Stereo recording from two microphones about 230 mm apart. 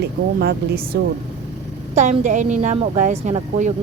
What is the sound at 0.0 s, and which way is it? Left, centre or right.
Speech, right.